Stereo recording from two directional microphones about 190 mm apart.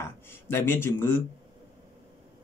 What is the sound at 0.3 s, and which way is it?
Speech, 10° left (ahead or behind).